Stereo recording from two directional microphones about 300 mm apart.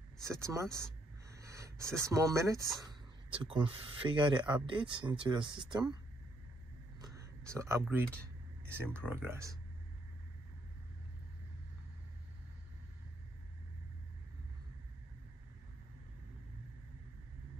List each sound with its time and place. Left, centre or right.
0.2 s speech: centre
7.0 s a sound: centre
8.6 s speech: centre